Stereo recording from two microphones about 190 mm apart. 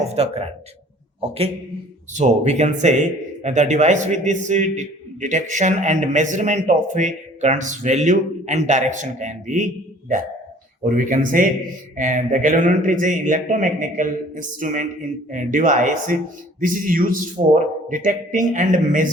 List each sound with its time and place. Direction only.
0.1 s speech: 35° right (ahead or behind)
10.8 s a man's voice: 45° right (ahead or behind)